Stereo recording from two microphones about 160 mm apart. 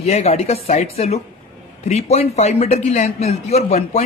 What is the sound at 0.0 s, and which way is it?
A man's voice, 40° left (ahead or behind).